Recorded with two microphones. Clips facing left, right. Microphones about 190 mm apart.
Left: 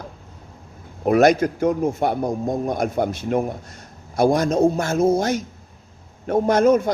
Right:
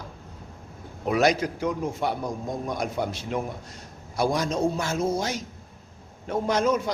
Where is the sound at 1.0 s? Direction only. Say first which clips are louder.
Left 7 dB; 50° left (ahead or behind).